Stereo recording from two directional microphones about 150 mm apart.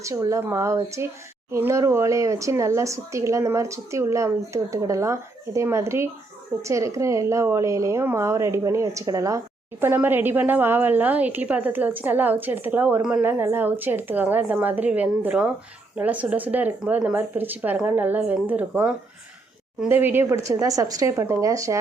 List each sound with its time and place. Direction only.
0.0 s a woman's voice: 20° right (ahead or behind)